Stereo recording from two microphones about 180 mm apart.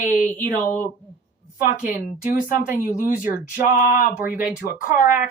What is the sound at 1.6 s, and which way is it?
Speech, 45° left (ahead or behind).